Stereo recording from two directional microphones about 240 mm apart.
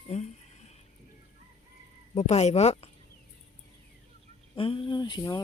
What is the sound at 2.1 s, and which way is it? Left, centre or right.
Speech, left.